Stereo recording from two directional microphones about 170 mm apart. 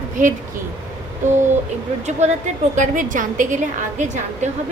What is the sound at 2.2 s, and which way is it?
A woman's voice, 40° right (ahead or behind).